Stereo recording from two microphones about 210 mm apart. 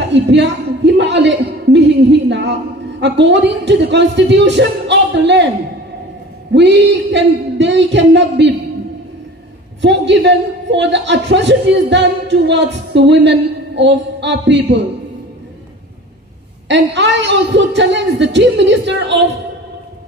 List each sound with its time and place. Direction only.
0.1 s a sound: 55° right (ahead or behind)
2.2 s a man's voice: 55° right (ahead or behind)
6.5 s a man's voice: 55° right (ahead or behind)
9.8 s a man's voice: 60° right (ahead or behind)
16.6 s a man's voice: 60° right (ahead or behind)